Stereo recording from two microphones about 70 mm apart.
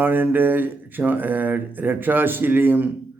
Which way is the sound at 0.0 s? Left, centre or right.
Right.